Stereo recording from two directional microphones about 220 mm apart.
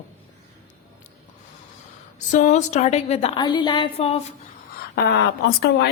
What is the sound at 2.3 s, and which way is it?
A woman's voice, 35° left (ahead or behind).